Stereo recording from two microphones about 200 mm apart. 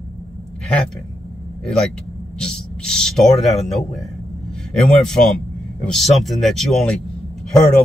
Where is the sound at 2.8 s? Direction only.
Centre (ahead or behind).